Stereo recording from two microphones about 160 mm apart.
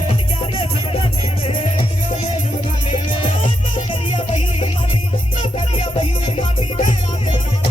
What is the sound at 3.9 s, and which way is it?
Music, 35° left (ahead or behind).